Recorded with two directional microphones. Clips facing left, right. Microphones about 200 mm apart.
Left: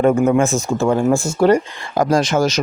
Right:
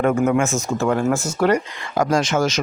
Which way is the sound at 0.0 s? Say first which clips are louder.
Left 4 dB; 30° left (ahead or behind).